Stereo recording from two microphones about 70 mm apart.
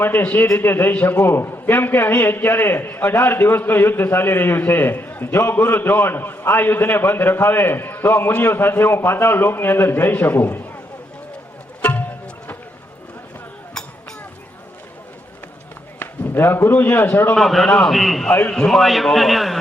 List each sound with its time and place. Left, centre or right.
0.0 s a man's voice: left
11.8 s music: left
16.0 s a man's voice: left
17.3 s a man's voice: centre